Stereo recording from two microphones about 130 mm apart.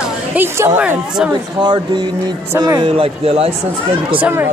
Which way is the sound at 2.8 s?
50° right (ahead or behind).